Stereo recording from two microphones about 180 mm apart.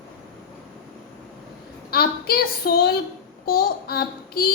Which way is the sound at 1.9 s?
60° left (ahead or behind).